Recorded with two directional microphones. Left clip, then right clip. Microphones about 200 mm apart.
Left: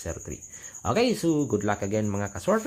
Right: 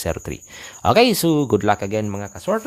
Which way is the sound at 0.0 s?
40° right (ahead or behind).